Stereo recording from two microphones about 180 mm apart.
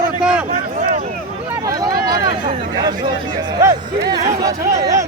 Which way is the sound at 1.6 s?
20° right (ahead or behind).